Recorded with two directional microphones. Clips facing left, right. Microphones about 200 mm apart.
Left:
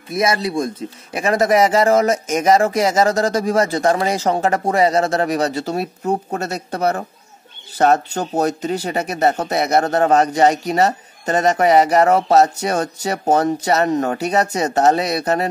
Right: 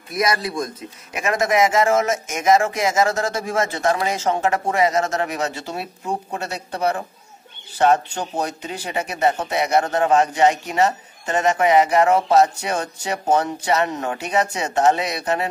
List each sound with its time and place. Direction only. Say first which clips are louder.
0.1 s speech: left 3 dB; 25° left (ahead or behind)